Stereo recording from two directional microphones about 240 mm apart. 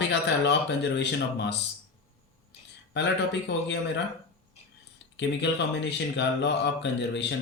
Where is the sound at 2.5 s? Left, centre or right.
Left.